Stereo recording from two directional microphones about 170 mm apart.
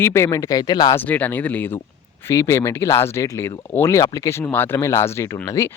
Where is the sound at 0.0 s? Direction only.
15° left (ahead or behind).